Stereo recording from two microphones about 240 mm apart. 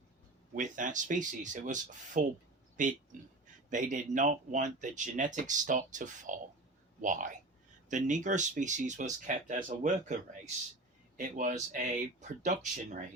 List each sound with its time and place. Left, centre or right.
0.5 s speech: right